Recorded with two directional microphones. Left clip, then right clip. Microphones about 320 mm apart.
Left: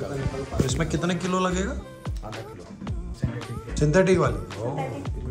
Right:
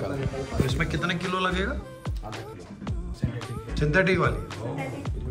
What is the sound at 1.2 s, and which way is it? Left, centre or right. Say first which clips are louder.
Music: left 1 dB; centre.